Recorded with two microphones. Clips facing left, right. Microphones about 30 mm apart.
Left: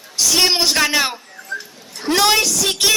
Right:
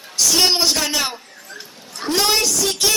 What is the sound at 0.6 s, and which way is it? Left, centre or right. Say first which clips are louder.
Speech: left 3 dB; left.